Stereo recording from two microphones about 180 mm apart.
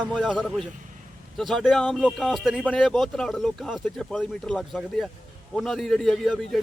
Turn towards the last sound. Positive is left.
turn(degrees=0)  # may be behind; listen again after turning